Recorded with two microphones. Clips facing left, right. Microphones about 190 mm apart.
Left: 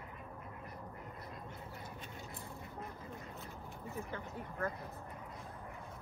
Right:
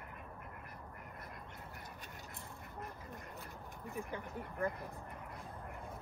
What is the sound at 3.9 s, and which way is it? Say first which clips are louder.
Speech: right 1 dB; 15° right (ahead or behind).